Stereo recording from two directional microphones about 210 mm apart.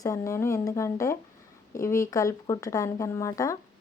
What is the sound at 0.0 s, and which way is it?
Speech, 15° left (ahead or behind).